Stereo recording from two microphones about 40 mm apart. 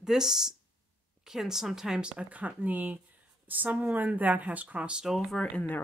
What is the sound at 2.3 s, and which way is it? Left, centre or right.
A woman's voice, right.